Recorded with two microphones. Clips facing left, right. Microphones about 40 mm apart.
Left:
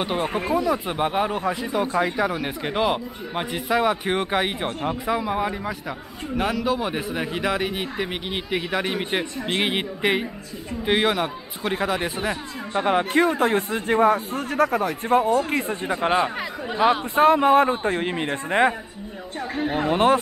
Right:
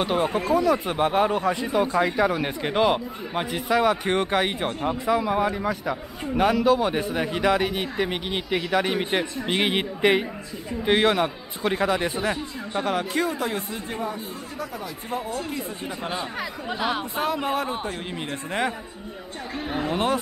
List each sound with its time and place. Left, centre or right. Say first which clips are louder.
0.0 s speech: right 1 dB; centre
12.8 s speech: left 6 dB; left
13.2 s speech: left 6 dB; left
15.5 s speech: left 7 dB; left
16.6 s speech: left 8 dB; centre
17.1 s speech: left 9 dB; left
19.5 s speech: left 4 dB; centre